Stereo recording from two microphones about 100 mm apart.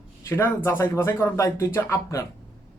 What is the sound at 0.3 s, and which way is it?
Speech, 25° left (ahead or behind).